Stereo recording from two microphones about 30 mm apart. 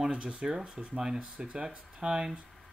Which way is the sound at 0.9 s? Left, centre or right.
Right.